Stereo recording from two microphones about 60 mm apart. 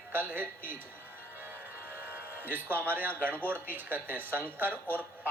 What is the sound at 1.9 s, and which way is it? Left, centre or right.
Music, right.